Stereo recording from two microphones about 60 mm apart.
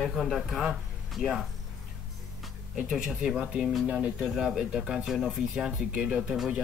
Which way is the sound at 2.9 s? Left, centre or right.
Centre.